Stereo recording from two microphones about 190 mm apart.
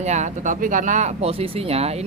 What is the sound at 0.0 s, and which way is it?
Speech, 40° right (ahead or behind).